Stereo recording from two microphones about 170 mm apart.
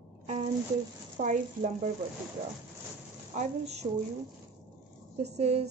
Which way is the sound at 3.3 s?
40° right (ahead or behind).